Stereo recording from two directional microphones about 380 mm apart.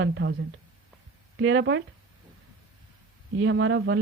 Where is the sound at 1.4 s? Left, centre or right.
Right.